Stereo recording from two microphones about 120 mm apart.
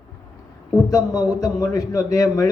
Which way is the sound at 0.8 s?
30° left (ahead or behind).